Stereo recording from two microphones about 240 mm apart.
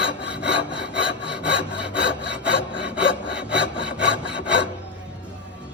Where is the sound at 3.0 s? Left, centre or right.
Left.